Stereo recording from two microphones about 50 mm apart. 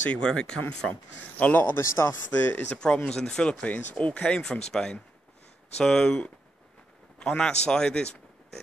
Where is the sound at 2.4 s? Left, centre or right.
Left.